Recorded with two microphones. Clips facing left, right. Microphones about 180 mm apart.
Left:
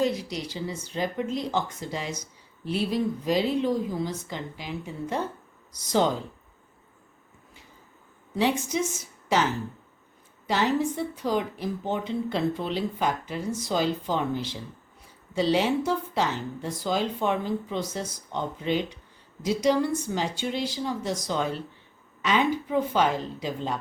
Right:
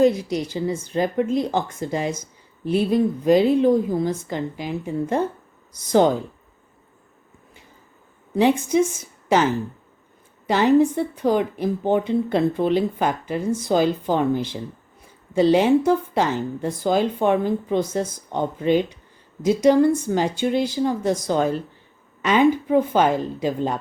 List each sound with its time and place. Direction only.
0.0 s a woman's voice: 50° right (ahead or behind)
8.4 s a woman's voice: 55° right (ahead or behind)